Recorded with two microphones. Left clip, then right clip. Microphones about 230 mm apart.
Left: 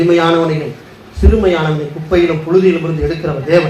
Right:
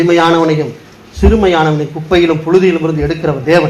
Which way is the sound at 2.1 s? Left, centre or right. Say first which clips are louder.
Right 2 dB; right.